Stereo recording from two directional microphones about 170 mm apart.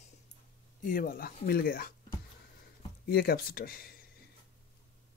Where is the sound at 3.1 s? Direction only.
65° left (ahead or behind).